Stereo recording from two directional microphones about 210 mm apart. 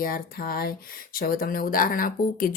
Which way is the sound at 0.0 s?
45° left (ahead or behind).